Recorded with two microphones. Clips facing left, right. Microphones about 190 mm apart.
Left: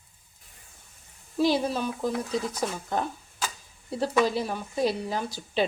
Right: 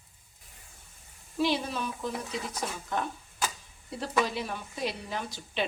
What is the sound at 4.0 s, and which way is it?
A woman's voice, 35° left (ahead or behind).